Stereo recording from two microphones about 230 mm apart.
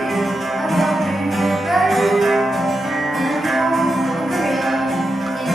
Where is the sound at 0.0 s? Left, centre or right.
Centre.